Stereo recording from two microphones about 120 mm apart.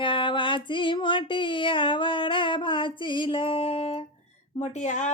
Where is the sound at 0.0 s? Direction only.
45° left (ahead or behind).